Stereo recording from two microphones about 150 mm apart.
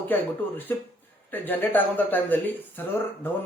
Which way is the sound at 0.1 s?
15° left (ahead or behind).